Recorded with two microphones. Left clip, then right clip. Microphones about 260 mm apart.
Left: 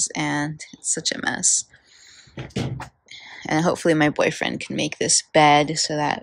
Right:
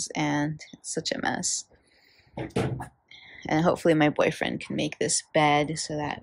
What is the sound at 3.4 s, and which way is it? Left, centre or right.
Speech, centre.